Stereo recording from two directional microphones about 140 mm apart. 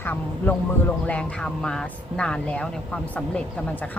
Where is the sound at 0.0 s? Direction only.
15° left (ahead or behind).